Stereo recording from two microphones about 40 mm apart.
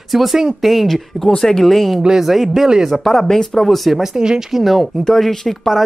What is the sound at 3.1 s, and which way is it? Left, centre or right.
Speech, centre.